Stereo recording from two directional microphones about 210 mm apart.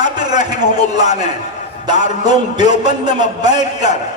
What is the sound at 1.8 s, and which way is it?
A man's voice, 20° right (ahead or behind).